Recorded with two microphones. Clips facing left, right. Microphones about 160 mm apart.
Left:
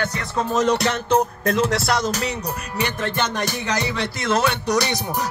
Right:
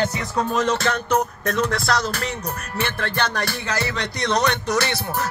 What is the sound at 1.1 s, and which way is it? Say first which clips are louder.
Music: left 4 dB; 30° left (ahead or behind).